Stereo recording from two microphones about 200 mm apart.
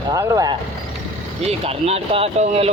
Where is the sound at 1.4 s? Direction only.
30° right (ahead or behind).